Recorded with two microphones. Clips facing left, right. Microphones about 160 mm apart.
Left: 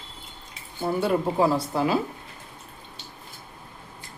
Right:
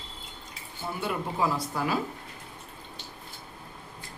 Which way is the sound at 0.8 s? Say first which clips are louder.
Left 8 dB; 35° left (ahead or behind).